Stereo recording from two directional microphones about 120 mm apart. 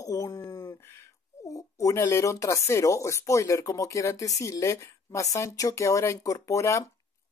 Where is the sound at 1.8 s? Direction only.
25° left (ahead or behind).